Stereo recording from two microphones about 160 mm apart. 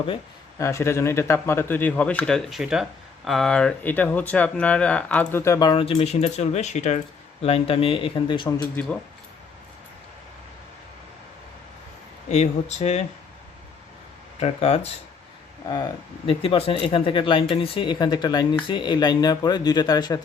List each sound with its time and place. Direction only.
0.6 s speech: 15° left (ahead or behind)
5.8 s speech: 35° left (ahead or behind)
7.4 s speech: 35° left (ahead or behind)
8.7 s speech: 10° left (ahead or behind)
12.3 s speech: 45° left (ahead or behind)
14.3 s speech: 40° left (ahead or behind)
15.7 s speech: 25° left (ahead or behind)
16.4 s speech: 35° left (ahead or behind)